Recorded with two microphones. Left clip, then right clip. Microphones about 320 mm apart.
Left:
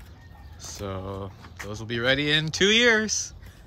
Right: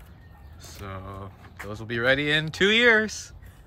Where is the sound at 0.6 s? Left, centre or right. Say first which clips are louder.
Left 5 dB; centre.